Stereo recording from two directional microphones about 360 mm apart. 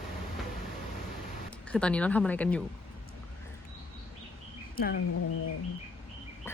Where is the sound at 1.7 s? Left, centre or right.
Centre.